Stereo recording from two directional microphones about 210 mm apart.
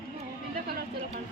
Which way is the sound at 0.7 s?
45° right (ahead or behind).